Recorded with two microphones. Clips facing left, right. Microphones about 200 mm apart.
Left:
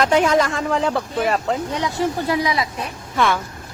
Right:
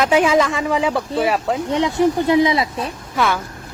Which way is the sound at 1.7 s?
25° right (ahead or behind).